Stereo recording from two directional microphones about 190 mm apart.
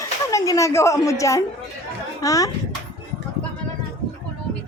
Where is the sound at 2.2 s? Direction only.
15° left (ahead or behind).